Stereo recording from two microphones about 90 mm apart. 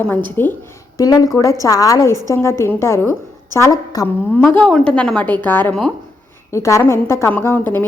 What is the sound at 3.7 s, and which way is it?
Speech, 40° left (ahead or behind).